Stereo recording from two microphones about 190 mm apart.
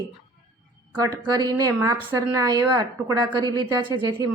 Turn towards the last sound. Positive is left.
turn(degrees=-25)  # may be behind; listen again after turning